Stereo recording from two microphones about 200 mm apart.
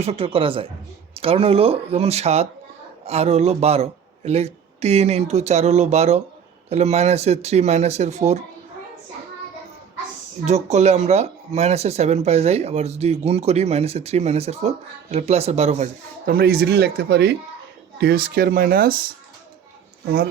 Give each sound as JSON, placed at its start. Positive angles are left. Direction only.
{"t": 0.0, "sound": "speech", "side_deg": -30}
{"t": 10.4, "sound": "speech", "side_deg": -35}
{"t": 16.2, "sound": "speech", "side_deg": -50}